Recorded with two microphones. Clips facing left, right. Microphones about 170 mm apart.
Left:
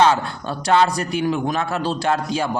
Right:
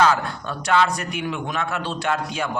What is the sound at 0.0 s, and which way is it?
A man's voice, 30° left (ahead or behind).